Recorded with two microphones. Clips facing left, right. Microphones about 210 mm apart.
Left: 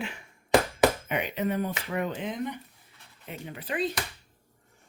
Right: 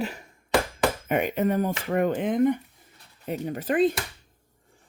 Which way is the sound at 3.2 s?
40° right (ahead or behind).